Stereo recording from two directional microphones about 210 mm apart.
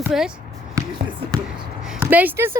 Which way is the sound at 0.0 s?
Centre (ahead or behind).